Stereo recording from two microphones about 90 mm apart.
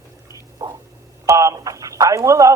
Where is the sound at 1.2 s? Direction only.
35° right (ahead or behind).